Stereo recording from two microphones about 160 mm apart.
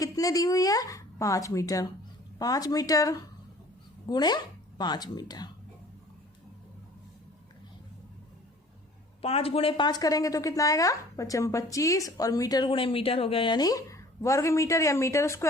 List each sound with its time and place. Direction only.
0.0 s a woman's voice: 20° left (ahead or behind)
9.2 s a woman's voice: 40° left (ahead or behind); by 15.4 s 15° left (ahead or behind)